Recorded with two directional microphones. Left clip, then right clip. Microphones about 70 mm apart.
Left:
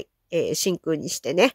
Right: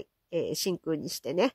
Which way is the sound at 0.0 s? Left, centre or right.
Centre.